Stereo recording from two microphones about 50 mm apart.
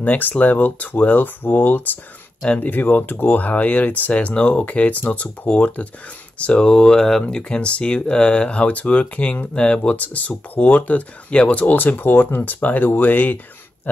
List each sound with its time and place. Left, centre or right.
0.0 s speech: left
12.6 s speech: left